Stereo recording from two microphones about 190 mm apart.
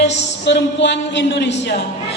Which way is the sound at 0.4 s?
65° left (ahead or behind).